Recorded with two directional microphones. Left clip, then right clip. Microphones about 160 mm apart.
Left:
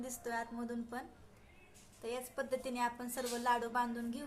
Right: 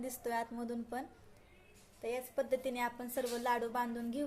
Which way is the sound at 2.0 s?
20° right (ahead or behind).